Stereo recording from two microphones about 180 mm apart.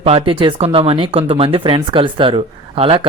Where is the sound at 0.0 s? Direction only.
30° right (ahead or behind).